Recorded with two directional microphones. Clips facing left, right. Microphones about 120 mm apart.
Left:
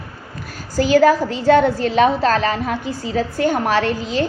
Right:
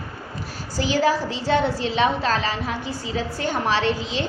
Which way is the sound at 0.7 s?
45° left (ahead or behind).